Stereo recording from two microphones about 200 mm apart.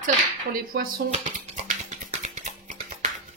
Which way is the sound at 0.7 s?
50° right (ahead or behind).